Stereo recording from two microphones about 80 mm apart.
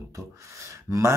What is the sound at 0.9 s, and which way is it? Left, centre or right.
Speech, right.